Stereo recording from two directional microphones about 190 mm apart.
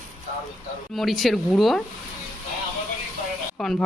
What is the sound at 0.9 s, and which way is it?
Speech, centre (ahead or behind).